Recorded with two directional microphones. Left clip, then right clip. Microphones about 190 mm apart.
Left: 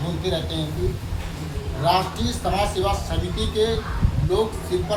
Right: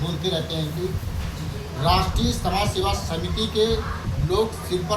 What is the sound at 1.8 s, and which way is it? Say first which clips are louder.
Speech: left 1 dB; 15° left (ahead or behind).